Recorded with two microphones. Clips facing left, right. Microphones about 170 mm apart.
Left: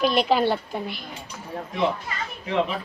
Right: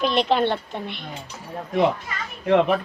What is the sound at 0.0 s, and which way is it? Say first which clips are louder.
A woman's voice: even; 5° left (ahead or behind).